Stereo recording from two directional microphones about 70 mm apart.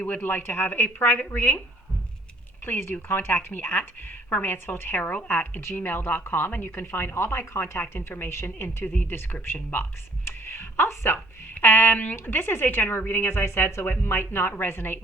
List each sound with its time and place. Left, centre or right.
0.0 s a woman's voice: left
2.6 s a woman's voice: left
10.2 s a sound: left
11.5 s speech: left